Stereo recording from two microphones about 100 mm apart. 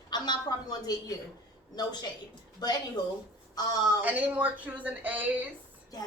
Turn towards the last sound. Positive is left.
turn(degrees=-15)  # may be behind; listen again after turning